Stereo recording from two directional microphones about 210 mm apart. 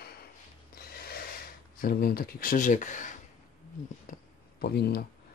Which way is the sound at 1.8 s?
45° left (ahead or behind).